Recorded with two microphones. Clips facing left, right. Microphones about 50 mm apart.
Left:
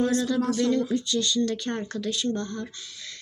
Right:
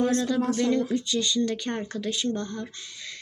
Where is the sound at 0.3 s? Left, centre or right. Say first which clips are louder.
Even; centre.